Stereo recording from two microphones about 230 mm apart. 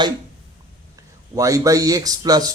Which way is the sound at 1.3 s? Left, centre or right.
Centre.